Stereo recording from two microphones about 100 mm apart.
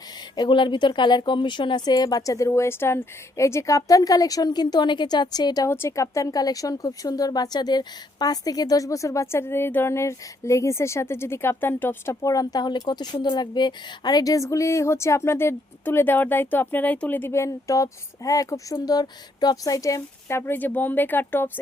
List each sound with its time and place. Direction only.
0.3 s a woman's voice: 55° left (ahead or behind)
5.6 s speech: 25° left (ahead or behind)
12.2 s a woman's voice: 35° left (ahead or behind); by 21.6 s 20° left (ahead or behind)